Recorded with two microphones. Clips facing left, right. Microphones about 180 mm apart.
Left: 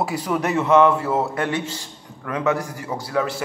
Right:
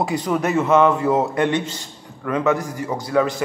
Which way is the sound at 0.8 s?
15° right (ahead or behind).